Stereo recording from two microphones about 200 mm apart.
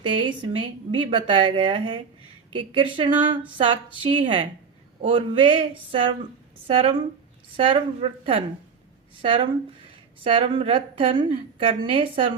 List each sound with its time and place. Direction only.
0.0 s a woman's voice: 25° right (ahead or behind)